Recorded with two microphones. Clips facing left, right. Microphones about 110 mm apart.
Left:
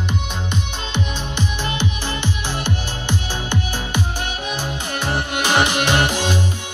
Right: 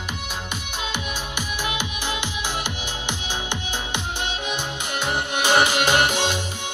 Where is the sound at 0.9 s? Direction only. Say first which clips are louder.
Left 6 dB; 10° right (ahead or behind).